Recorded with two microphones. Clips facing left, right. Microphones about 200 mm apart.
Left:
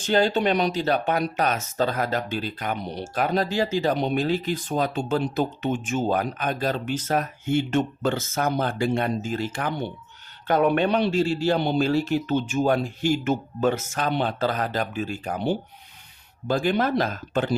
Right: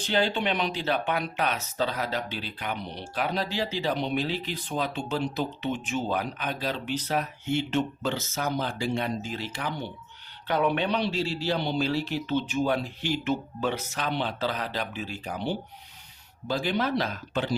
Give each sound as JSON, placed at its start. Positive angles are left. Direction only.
{"t": 0.0, "sound": "speech", "side_deg": 45}